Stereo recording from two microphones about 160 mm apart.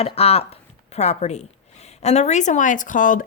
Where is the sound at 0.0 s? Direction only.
40° left (ahead or behind).